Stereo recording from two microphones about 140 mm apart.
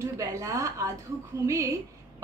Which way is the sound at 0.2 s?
20° right (ahead or behind).